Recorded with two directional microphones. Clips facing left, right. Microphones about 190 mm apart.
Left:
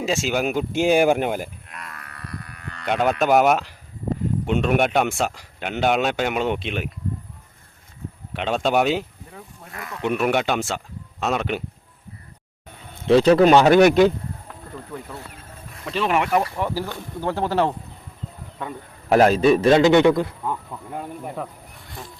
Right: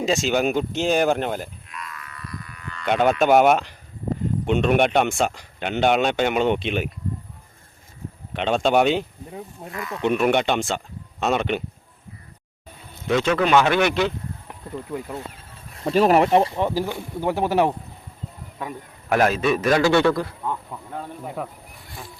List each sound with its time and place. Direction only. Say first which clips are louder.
0.0 s speech: right 2 dB; 5° left (ahead or behind)
1.7 s livestock: right 2 dB; 60° left (ahead or behind)
2.8 s speech: right 2 dB; centre (ahead or behind)
8.3 s speech: right 2 dB; 5° left (ahead or behind)
13.1 s speech: left 6 dB; 35° left (ahead or behind)
14.9 s speech: right 5 dB; 20° right (ahead or behind)
15.7 s speech: right 6 dB; 40° right (ahead or behind); by 17.7 s 15° right (ahead or behind)
19.0 s a man's voice: left 4 dB; 35° left (ahead or behind)
21.2 s speech: right 2 dB; 5° right (ahead or behind)